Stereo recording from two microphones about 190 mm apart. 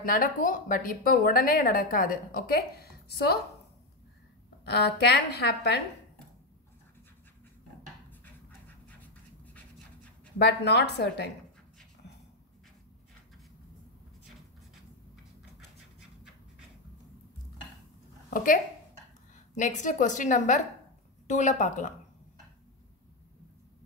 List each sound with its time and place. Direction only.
0.0 s a woman's voice: 45° left (ahead or behind)
4.6 s a woman's voice: 60° left (ahead or behind)
8.1 s dog: 10° left (ahead or behind)
10.4 s a woman's voice: 65° left (ahead or behind)
18.3 s a woman's voice: 45° left (ahead or behind)